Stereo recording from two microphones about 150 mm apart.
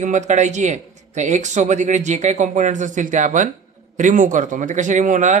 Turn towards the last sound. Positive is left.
turn(degrees=-55)  # may be behind; listen again after turning